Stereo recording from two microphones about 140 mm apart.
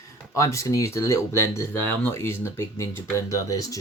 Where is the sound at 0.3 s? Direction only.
20° left (ahead or behind).